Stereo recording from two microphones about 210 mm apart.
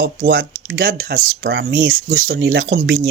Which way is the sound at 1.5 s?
70° right (ahead or behind).